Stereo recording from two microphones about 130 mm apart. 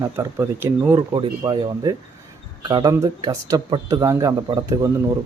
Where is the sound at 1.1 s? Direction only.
30° right (ahead or behind).